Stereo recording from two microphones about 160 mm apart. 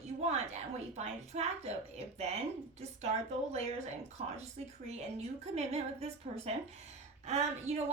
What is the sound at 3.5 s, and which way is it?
Speech, 45° right (ahead or behind).